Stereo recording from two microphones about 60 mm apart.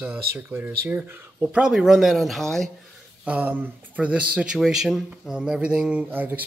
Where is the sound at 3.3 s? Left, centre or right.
Right.